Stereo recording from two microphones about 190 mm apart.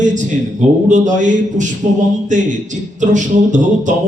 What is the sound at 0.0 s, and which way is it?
A man's voice, 40° right (ahead or behind).